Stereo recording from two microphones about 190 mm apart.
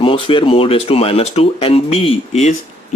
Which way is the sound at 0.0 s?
25° left (ahead or behind).